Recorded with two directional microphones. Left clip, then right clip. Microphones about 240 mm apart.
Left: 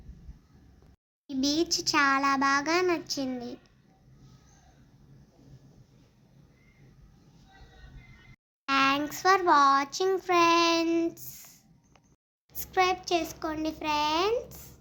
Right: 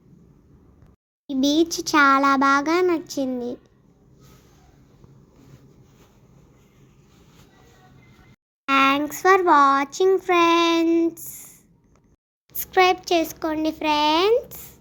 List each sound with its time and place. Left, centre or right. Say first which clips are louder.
1.3 s a child's voice: right 7 dB; centre
8.6 s a child's voice: right 7 dB; centre
12.5 s a child's voice: right 8 dB; right